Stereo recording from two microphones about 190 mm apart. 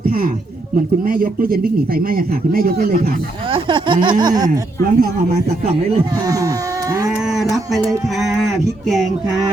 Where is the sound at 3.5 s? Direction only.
25° right (ahead or behind).